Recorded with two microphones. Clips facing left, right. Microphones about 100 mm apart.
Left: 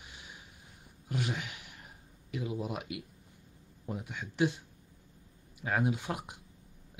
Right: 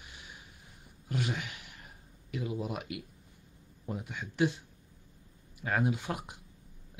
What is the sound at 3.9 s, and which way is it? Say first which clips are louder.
Speech: right 1 dB; 10° left (ahead or behind).